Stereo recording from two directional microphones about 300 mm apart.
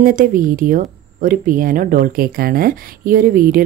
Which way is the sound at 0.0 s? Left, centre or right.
Right.